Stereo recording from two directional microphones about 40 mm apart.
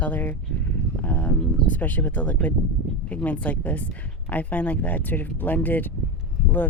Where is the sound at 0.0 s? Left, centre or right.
Left.